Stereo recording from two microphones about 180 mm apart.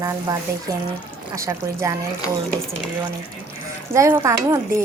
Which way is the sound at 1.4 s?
15° right (ahead or behind).